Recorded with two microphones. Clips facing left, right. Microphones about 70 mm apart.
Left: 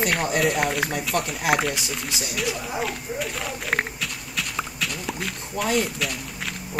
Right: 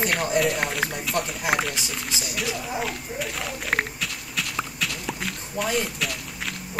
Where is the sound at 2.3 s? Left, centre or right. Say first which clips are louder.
Left 1 dB; centre.